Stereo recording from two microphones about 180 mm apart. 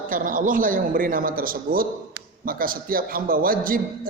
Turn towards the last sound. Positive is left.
turn(degrees=-50)  # may be behind; listen again after turning